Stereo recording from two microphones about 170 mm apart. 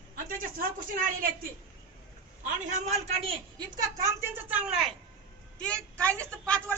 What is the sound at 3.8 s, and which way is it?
A woman's voice, 15° right (ahead or behind).